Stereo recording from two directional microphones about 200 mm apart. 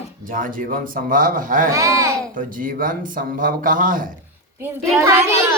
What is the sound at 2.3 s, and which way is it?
Speech, 40° right (ahead or behind).